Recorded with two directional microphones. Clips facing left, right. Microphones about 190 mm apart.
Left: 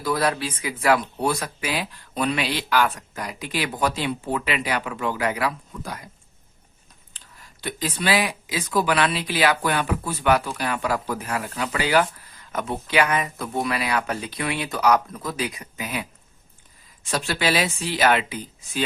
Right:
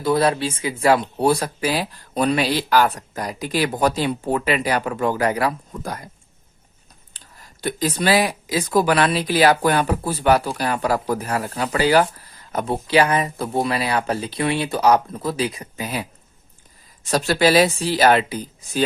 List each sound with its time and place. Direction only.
0.0 s speech: 25° right (ahead or behind); by 6.1 s 45° right (ahead or behind)
7.1 s a sound: 40° right (ahead or behind)
7.6 s speech: 40° right (ahead or behind)